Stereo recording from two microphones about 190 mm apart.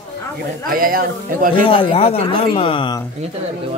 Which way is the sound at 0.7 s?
50° right (ahead or behind).